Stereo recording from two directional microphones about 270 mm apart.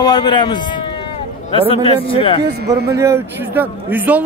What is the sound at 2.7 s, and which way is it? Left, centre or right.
Speech, centre.